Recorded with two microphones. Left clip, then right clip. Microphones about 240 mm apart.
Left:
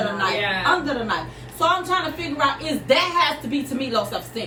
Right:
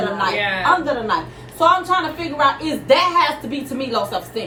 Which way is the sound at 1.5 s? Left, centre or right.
Centre.